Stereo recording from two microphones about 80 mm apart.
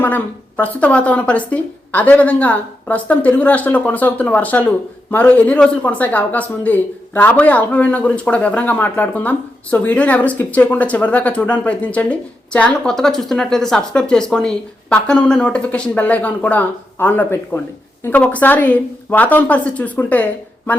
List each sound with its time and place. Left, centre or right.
0.0 s speech: centre